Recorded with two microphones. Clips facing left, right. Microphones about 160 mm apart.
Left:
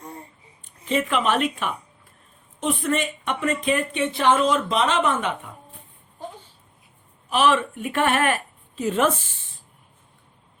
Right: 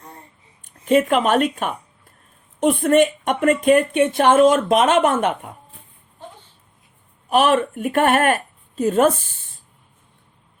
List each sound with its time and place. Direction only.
0.9 s speech: 50° right (ahead or behind)
7.3 s a woman's voice: 45° right (ahead or behind)